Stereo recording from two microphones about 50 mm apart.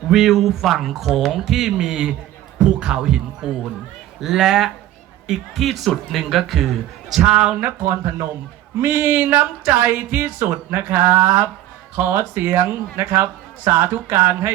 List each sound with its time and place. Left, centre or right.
0.1 s speech: centre
8.8 s speech: right